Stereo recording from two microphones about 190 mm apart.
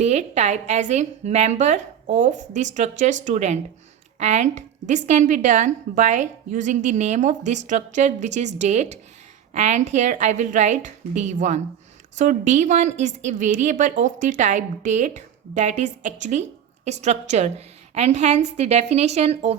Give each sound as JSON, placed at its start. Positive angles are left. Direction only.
{"t": 0.0, "sound": "a woman's voice", "side_deg": -35}